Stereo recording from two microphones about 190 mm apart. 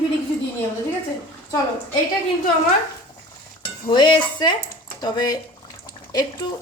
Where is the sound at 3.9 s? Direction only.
25° left (ahead or behind).